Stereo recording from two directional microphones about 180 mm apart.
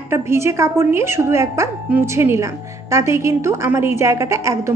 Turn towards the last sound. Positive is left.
turn(degrees=-15)  # may be behind; listen again after turning